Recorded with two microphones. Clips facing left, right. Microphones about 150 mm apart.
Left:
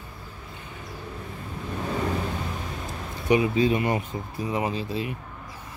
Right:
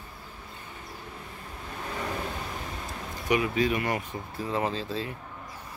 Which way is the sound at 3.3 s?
25° left (ahead or behind).